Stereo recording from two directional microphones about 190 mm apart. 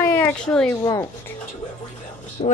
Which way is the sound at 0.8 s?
20° left (ahead or behind).